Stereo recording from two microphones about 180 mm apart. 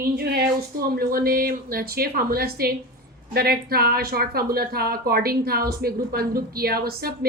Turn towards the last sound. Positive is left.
turn(degrees=-60)  # may be behind; listen again after turning